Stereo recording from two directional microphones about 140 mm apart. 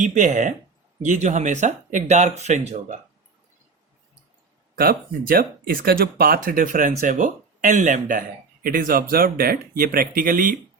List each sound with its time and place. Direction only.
0.0 s speech: 65° right (ahead or behind)
4.7 s speech: 90° right; by 8.2 s 65° right (ahead or behind)
8.6 s speech: 85° right